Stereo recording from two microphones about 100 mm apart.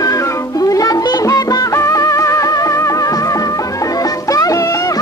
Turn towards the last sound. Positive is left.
turn(degrees=35)  # may be behind; listen again after turning